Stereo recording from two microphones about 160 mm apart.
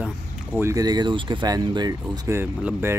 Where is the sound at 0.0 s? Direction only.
10° right (ahead or behind).